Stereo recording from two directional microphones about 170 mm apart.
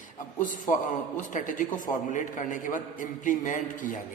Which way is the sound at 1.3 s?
50° left (ahead or behind).